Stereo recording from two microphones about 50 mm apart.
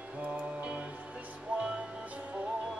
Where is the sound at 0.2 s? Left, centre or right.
Right.